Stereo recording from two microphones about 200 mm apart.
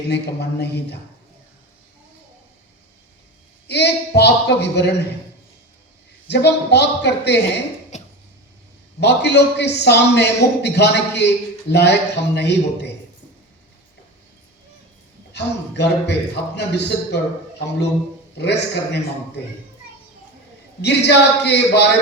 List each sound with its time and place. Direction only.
0.1 s a man's voice: 55° left (ahead or behind)
3.7 s a man's voice: 55° left (ahead or behind)
6.2 s a man's voice: 55° left (ahead or behind)
7.9 s cough: 35° left (ahead or behind)
9.0 s a man's voice: 55° left (ahead or behind)
15.3 s a man's voice: 60° left (ahead or behind)
18.3 s a man's voice: 55° left (ahead or behind)
20.8 s a man's voice: 55° left (ahead or behind)